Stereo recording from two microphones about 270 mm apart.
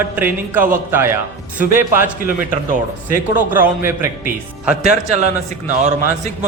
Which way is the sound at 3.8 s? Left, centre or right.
Centre.